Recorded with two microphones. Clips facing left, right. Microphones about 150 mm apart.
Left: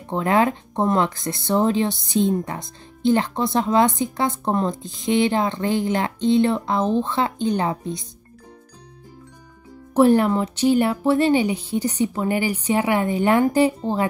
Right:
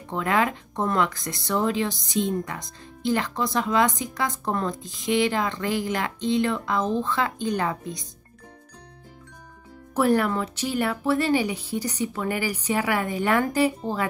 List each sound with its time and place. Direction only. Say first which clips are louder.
0.1 s speech: left 5 dB; 35° left (ahead or behind)
9.9 s speech: left 6 dB; 30° left (ahead or behind)